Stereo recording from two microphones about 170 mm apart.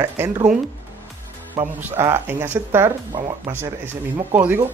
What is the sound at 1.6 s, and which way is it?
Speech, 15° right (ahead or behind).